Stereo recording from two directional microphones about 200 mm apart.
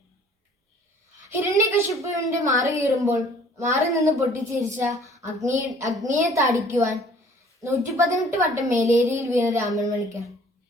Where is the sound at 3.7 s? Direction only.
15° right (ahead or behind).